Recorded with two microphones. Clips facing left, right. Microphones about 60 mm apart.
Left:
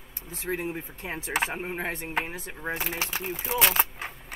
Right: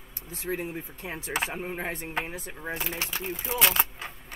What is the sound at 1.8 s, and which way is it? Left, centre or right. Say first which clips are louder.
Speech: left 3 dB; centre.